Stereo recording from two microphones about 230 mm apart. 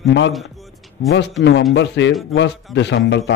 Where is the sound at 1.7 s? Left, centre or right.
Left.